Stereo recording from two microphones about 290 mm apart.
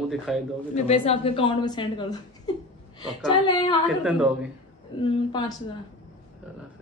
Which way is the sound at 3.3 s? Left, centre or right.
Centre.